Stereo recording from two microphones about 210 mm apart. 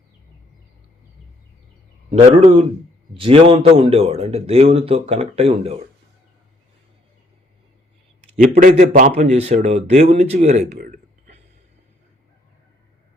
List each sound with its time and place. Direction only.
2.0 s a man's voice: 25° right (ahead or behind)
8.4 s speech: 40° right (ahead or behind)
10.8 s a sound: 40° right (ahead or behind)